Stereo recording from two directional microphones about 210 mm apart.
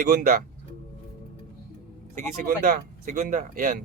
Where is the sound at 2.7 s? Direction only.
35° right (ahead or behind).